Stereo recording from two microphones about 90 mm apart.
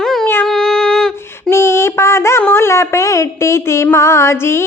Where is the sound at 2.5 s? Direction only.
30° left (ahead or behind).